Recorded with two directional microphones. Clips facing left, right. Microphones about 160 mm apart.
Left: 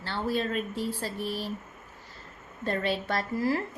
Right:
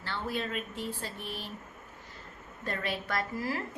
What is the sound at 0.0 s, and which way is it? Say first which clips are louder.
A woman's voice: left 5 dB; 30° left (ahead or behind).